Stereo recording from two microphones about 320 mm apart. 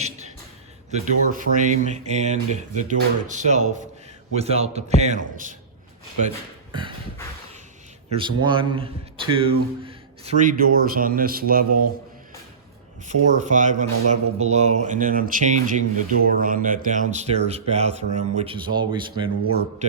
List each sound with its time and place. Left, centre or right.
0.9 s speech: right
8.1 s a man's voice: centre
13.3 s speech: right